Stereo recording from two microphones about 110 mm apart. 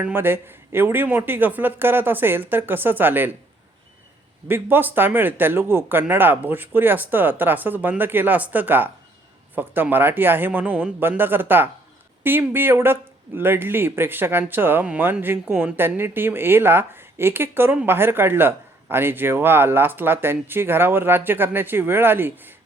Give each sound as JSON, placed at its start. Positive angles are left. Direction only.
{"t": 0.0, "sound": "speech", "side_deg": -20}
{"t": 4.4, "sound": "speech", "side_deg": -20}